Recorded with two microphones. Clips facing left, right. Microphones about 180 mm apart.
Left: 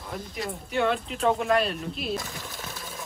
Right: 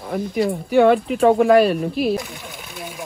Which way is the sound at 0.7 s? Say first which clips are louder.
Right 11 dB; 65° right (ahead or behind).